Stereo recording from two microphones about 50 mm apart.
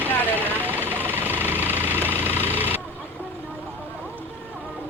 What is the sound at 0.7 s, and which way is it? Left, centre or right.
Vehicle, right.